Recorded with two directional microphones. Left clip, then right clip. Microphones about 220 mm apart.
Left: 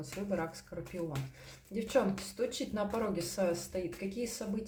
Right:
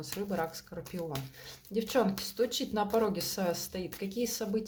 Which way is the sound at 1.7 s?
45° right (ahead or behind).